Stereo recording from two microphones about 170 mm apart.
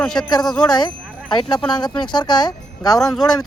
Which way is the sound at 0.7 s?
25° left (ahead or behind).